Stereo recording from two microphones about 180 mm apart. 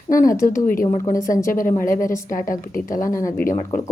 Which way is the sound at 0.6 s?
50° left (ahead or behind).